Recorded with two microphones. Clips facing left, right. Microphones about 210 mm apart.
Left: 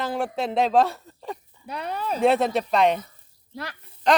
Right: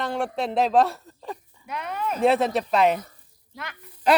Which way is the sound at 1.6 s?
35° left (ahead or behind).